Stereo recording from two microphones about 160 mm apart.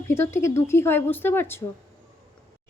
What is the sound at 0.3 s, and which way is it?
A woman's voice, 15° left (ahead or behind).